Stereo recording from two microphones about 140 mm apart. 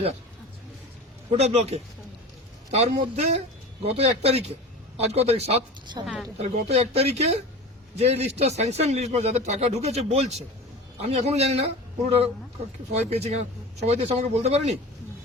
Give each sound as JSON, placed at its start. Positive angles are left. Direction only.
{"t": 1.3, "sound": "speech", "side_deg": -50}